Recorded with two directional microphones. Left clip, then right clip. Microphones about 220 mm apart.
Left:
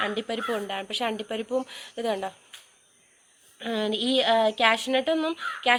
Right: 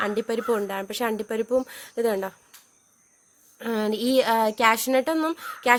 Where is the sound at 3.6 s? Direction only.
55° right (ahead or behind).